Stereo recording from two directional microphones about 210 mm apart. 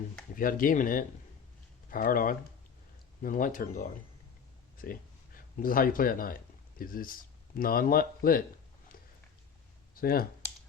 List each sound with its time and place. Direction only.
0.3 s speech: 40° left (ahead or behind)
5.5 s speech: 40° left (ahead or behind)
9.9 s speech: 45° left (ahead or behind)